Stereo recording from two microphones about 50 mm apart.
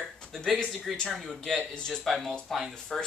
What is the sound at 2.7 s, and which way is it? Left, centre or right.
Speech, centre.